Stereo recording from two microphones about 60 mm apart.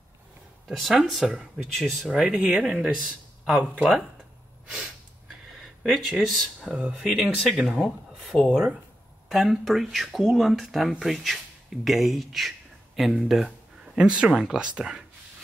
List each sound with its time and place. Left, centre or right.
0.7 s speech: centre
2.0 s speech: centre
5.6 s speech: centre
6.7 s speech: right
7.0 s speech: centre